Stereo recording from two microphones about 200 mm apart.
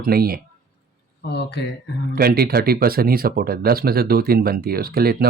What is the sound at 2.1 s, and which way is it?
Speech, 50° right (ahead or behind).